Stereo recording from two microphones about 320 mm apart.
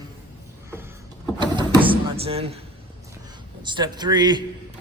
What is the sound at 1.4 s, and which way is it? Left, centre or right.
Vehicle, centre.